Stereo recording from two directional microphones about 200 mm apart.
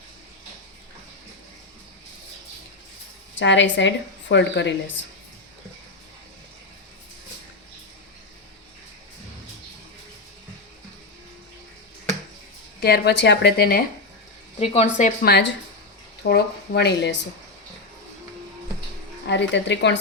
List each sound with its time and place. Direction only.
3.3 s speech: 65° left (ahead or behind)
12.8 s speech: 55° left (ahead or behind)
14.6 s speech: 30° left (ahead or behind); by 17.2 s 60° left (ahead or behind)
19.3 s speech: 60° left (ahead or behind)